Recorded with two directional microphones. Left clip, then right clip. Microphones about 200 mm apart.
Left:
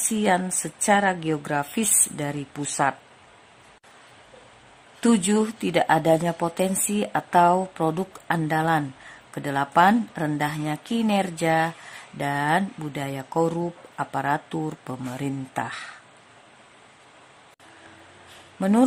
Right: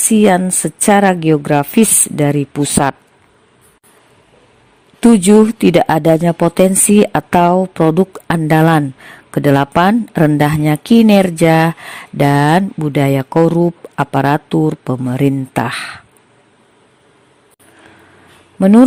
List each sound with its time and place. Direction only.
0.1 s a woman's voice: 40° right (ahead or behind)
4.9 s a woman's voice: 35° right (ahead or behind)
18.6 s a woman's voice: 35° right (ahead or behind)